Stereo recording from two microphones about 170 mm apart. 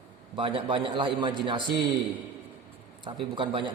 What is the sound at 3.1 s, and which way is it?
Speech, 30° right (ahead or behind).